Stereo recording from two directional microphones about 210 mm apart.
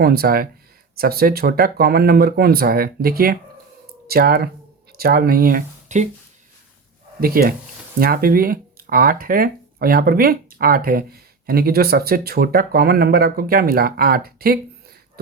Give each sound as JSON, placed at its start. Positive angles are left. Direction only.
{"t": 0.0, "sound": "speech", "side_deg": -45}
{"t": 7.2, "sound": "speech", "side_deg": -45}